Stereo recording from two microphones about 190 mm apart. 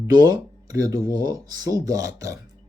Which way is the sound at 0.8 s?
20° right (ahead or behind).